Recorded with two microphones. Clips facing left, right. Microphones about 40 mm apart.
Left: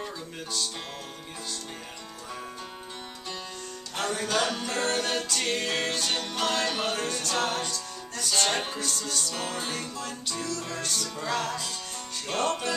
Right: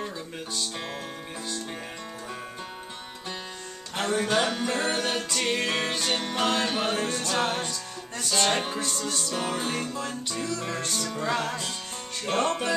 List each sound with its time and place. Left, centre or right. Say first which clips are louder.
3.9 s music: right 3 dB; centre